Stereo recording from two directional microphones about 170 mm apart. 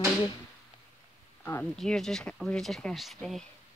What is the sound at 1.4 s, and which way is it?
Speech, 10° left (ahead or behind).